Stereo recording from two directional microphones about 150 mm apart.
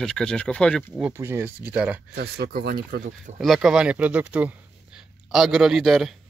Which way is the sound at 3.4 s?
Centre (ahead or behind).